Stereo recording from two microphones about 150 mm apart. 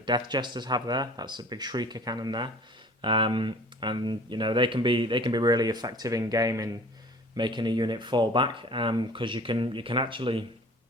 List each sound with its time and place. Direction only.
0.0 s speech: 30° right (ahead or behind)